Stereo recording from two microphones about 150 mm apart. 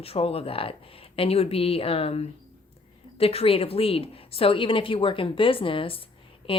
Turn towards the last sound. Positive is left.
turn(degrees=40)  # may be behind; listen again after turning